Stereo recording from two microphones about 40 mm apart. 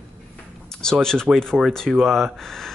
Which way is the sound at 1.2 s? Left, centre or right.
Centre.